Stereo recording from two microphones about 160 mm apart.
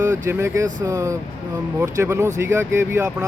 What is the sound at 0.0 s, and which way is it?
A man's voice, 15° right (ahead or behind).